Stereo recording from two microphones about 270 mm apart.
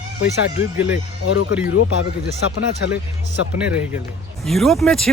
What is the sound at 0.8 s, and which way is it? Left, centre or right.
Speech, left.